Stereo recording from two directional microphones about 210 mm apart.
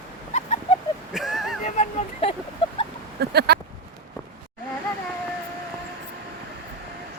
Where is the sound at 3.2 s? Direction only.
50° right (ahead or behind).